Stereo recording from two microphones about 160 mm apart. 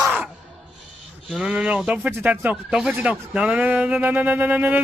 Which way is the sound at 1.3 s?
5° right (ahead or behind).